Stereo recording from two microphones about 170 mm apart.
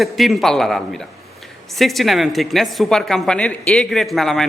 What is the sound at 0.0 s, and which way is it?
Speech, centre (ahead or behind).